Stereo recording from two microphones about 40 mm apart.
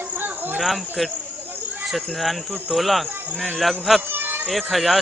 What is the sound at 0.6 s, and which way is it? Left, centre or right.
Speech, centre.